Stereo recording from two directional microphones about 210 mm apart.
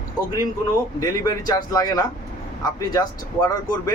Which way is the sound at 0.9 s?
15° left (ahead or behind).